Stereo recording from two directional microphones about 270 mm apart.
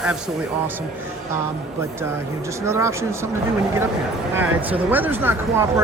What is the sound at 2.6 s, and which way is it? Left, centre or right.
Speech, centre.